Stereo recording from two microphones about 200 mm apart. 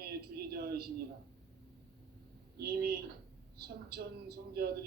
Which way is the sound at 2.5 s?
50° right (ahead or behind).